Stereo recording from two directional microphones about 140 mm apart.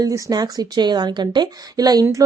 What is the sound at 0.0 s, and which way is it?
A woman's voice, 25° right (ahead or behind).